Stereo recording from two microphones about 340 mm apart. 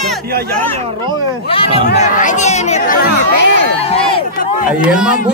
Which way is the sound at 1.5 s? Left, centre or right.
Centre.